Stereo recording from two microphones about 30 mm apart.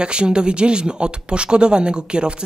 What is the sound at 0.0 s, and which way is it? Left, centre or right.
Speech, right.